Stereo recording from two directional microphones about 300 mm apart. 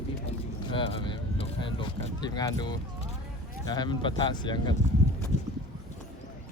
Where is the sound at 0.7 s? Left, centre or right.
Centre.